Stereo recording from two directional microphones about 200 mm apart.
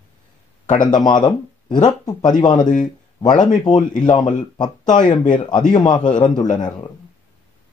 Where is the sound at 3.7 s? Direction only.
40° left (ahead or behind).